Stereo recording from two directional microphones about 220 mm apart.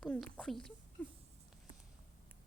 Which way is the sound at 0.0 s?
5° left (ahead or behind).